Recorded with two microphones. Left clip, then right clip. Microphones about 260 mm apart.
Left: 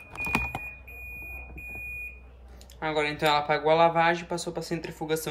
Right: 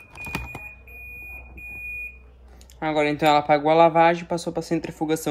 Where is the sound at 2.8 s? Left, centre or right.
Right.